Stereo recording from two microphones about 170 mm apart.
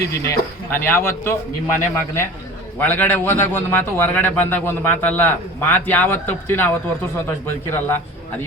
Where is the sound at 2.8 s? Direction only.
10° left (ahead or behind).